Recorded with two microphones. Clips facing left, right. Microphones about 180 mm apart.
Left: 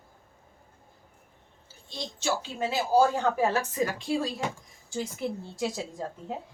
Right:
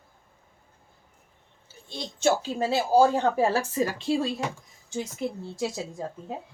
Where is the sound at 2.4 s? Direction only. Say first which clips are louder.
Right 4 dB; 35° right (ahead or behind).